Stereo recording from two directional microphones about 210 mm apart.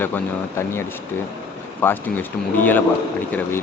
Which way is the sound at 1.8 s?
10° left (ahead or behind).